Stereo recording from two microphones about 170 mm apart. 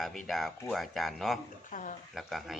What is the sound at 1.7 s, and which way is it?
Speech, 50° left (ahead or behind).